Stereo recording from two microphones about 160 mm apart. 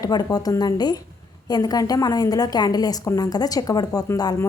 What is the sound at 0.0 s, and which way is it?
A woman's voice, 25° left (ahead or behind).